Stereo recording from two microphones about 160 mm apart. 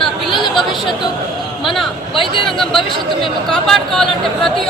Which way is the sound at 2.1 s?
30° left (ahead or behind).